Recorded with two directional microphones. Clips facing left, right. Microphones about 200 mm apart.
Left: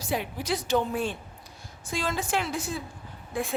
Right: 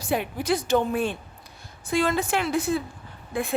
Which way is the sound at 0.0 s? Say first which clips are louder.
Right 4 dB; 55° right (ahead or behind).